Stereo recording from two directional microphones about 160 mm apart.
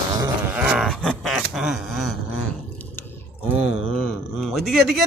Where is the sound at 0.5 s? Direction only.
5° right (ahead or behind).